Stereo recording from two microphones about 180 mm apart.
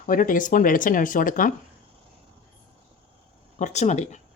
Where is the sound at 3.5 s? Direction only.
40° left (ahead or behind).